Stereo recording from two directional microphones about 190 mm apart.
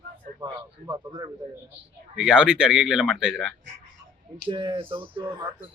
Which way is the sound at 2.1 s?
5° right (ahead or behind).